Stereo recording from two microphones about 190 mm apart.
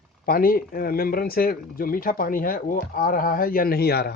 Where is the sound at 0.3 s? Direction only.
50° left (ahead or behind).